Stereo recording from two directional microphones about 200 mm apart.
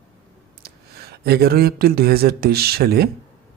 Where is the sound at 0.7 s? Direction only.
50° right (ahead or behind).